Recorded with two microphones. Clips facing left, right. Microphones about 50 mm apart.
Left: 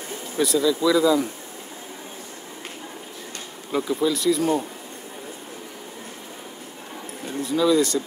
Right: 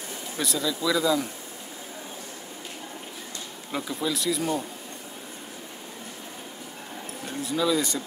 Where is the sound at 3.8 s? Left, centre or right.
Centre.